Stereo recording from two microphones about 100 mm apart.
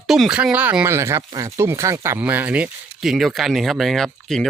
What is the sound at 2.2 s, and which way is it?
Speech, 15° right (ahead or behind).